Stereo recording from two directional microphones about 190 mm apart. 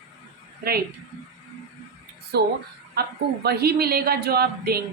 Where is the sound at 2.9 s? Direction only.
55° right (ahead or behind).